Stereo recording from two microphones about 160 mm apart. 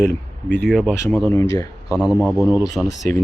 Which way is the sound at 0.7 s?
Centre (ahead or behind).